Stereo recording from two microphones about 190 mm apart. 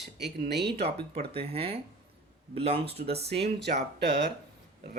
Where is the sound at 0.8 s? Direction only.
30° right (ahead or behind).